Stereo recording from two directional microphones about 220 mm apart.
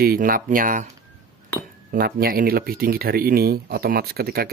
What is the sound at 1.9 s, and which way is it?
Speech, 45° right (ahead or behind).